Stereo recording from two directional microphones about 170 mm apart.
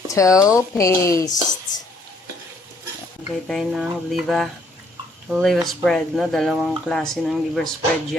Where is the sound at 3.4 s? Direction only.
Centre (ahead or behind).